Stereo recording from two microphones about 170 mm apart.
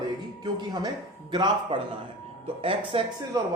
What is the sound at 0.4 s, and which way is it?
A man's voice, 25° right (ahead or behind).